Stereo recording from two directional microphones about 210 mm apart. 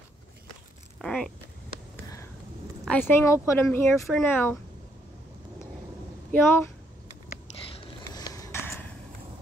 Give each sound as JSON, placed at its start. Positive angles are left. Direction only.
{"t": 1.0, "sound": "zipper", "side_deg": 5}
{"t": 2.8, "sound": "speech", "side_deg": 5}
{"t": 6.3, "sound": "speech", "side_deg": 10}
{"t": 7.6, "sound": "a sound", "side_deg": 20}